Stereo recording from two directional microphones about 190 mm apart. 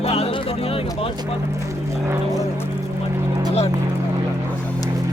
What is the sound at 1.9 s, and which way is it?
Speech, 15° right (ahead or behind).